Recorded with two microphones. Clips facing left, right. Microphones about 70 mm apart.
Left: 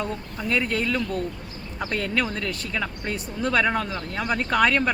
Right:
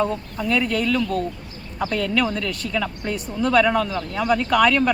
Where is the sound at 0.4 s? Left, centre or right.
Left.